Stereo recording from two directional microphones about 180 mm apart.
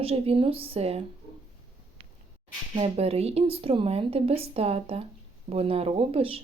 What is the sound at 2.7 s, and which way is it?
Speech, 35° right (ahead or behind).